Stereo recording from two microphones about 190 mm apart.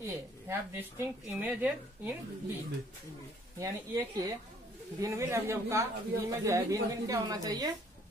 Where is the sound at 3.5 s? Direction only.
15° right (ahead or behind).